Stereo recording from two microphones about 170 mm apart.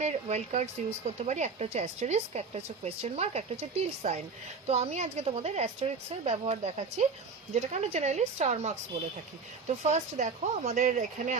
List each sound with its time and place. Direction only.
0.0 s speech: 40° right (ahead or behind)